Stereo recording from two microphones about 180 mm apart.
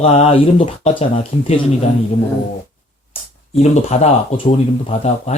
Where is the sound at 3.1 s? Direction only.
35° left (ahead or behind).